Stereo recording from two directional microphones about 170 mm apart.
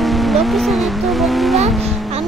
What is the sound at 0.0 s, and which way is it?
Vehicle, centre (ahead or behind).